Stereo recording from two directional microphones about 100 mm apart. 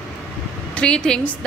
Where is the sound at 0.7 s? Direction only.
10° left (ahead or behind).